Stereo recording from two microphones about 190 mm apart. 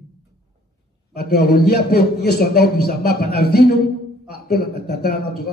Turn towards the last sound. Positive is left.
turn(degrees=60)  # may be behind; listen again after turning